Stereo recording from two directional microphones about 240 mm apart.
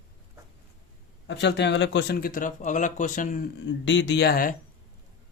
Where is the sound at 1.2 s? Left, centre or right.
Left.